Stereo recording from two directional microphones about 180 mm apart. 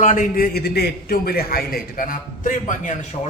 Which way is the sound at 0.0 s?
45° left (ahead or behind).